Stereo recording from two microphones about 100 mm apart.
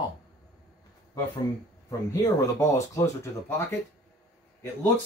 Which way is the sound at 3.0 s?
25° left (ahead or behind).